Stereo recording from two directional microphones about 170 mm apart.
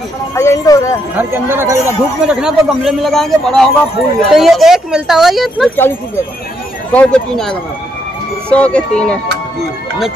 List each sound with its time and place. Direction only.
0.3 s speech: 15° left (ahead or behind)
1.1 s speech: 15° right (ahead or behind)
2.4 s speech: centre (ahead or behind)
5.8 s speech: 15° left (ahead or behind)